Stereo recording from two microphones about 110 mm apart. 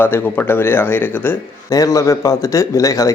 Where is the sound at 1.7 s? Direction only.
30° left (ahead or behind).